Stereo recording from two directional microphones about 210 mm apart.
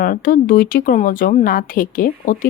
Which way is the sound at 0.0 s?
40° left (ahead or behind).